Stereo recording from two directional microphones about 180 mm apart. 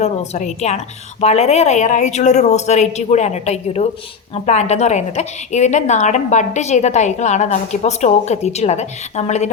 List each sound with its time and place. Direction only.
0.0 s a woman's voice: 40° left (ahead or behind)